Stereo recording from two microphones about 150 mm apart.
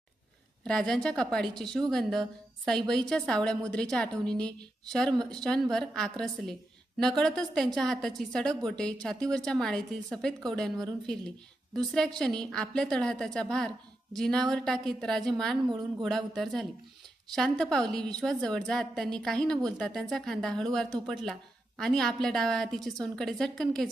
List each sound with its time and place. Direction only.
0.6 s a woman's voice: 5° left (ahead or behind)
15.7 s speech: 25° right (ahead or behind)
16.0 s a woman's voice: centre (ahead or behind)